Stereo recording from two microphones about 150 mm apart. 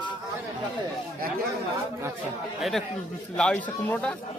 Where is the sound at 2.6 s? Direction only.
Centre (ahead or behind).